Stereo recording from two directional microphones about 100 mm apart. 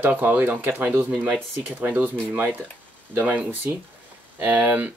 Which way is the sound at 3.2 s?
15° right (ahead or behind).